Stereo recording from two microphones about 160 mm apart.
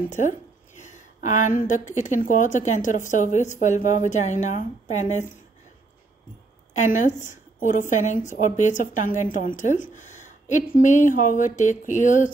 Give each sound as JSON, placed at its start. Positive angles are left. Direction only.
{"t": 0.1, "sound": "a woman's voice", "side_deg": 50}
{"t": 6.7, "sound": "a woman's voice", "side_deg": 50}